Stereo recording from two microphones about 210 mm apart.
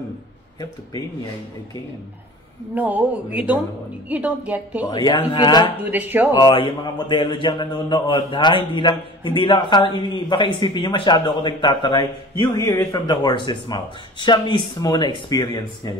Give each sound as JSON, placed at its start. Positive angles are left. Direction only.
{"t": 2.7, "sound": "speech", "side_deg": -10}
{"t": 4.8, "sound": "a man's voice", "side_deg": 20}
{"t": 5.9, "sound": "speech", "side_deg": -10}
{"t": 6.3, "sound": "a man's voice", "side_deg": 20}